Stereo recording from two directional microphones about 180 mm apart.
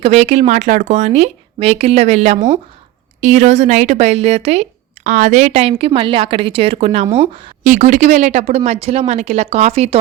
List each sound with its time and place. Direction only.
0.0 s speech: 35° right (ahead or behind)
7.6 s speech: 45° right (ahead or behind)